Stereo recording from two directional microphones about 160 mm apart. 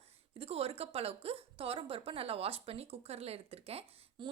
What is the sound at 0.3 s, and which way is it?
A woman's voice, 40° right (ahead or behind).